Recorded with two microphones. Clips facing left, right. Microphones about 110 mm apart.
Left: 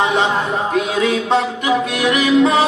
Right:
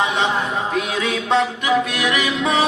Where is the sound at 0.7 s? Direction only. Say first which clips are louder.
Left 5 dB; 35° left (ahead or behind).